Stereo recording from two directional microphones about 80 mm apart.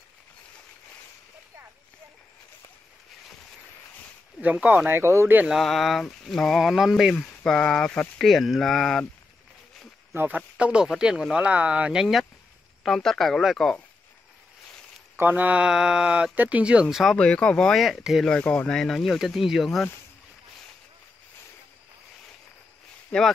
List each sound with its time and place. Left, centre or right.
4.4 s speech: centre
5.5 s speech: centre
7.2 s speech: centre
10.1 s speech: right
10.6 s speech: centre
15.1 s speech: right
16.9 s speech: centre
17.2 s speech: centre
23.1 s speech: centre